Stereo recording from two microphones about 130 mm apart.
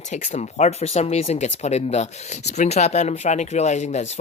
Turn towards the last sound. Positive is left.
turn(degrees=60)  # may be behind; listen again after turning